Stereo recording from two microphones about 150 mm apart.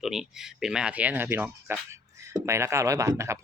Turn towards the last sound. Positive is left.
turn(degrees=-20)  # may be behind; listen again after turning